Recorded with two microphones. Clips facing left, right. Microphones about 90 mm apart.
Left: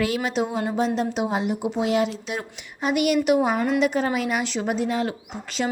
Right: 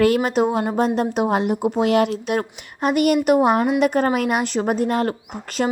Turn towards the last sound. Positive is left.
turn(degrees=-50)  # may be behind; listen again after turning